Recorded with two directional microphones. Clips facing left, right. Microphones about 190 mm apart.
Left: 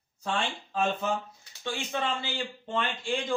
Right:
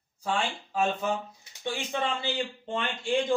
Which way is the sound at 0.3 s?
10° right (ahead or behind).